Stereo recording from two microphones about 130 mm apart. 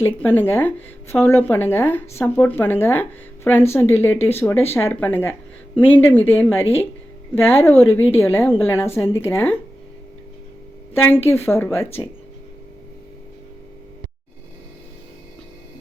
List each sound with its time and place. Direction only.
0.0 s speech: 15° left (ahead or behind)
11.3 s speech: 20° left (ahead or behind)